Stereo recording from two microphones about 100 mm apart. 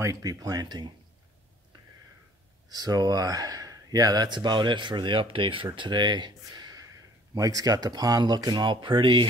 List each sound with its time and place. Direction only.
0.0 s speech: 40° right (ahead or behind)
2.7 s speech: 40° right (ahead or behind)